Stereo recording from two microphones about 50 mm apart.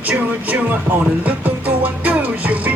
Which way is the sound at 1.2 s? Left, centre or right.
Right.